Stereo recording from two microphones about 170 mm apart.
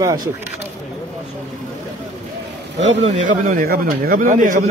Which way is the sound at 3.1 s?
50° right (ahead or behind).